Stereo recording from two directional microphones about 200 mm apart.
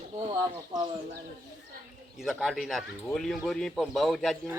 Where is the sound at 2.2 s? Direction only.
Centre (ahead or behind).